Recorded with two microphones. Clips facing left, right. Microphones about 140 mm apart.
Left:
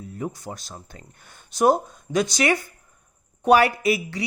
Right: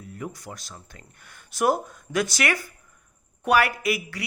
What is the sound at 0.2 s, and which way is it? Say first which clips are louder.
Speech: left 5 dB; 30° left (ahead or behind).